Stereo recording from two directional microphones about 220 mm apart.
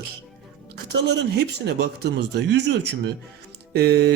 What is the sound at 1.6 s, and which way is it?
Speech, 50° right (ahead or behind).